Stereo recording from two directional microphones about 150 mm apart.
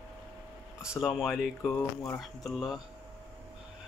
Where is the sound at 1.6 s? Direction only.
15° left (ahead or behind).